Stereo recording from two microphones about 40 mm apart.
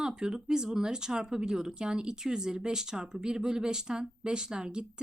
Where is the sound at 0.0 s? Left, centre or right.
Centre.